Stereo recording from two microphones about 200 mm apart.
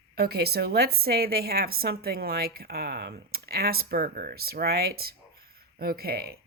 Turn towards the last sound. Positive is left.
turn(degrees=-50)  # may be behind; listen again after turning